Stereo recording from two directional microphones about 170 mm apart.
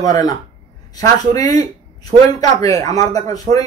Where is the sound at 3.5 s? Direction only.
55° right (ahead or behind).